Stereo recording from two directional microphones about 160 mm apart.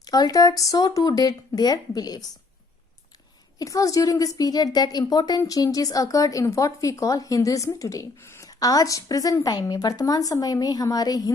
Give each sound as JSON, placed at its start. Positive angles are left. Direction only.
{"t": 0.0, "sound": "a woman's voice", "side_deg": 25}
{"t": 3.6, "sound": "a woman's voice", "side_deg": 20}